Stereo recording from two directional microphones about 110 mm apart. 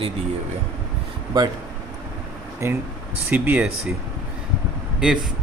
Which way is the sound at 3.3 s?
10° right (ahead or behind).